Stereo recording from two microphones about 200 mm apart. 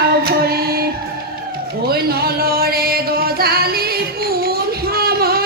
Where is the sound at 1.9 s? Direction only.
50° right (ahead or behind).